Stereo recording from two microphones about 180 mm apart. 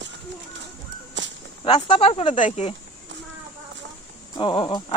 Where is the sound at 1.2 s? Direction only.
85° right.